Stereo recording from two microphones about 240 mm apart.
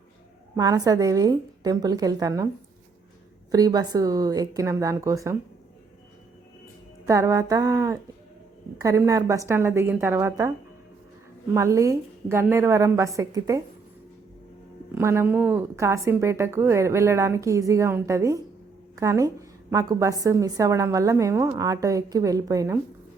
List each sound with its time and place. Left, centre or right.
0.5 s a woman's voice: centre
3.5 s a woman's voice: centre
7.1 s a woman's voice: centre
11.5 s a woman's voice: centre
14.9 s a woman's voice: centre